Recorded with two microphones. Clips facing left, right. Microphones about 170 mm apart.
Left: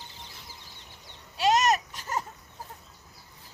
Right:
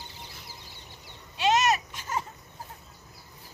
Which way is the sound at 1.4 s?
40° left (ahead or behind).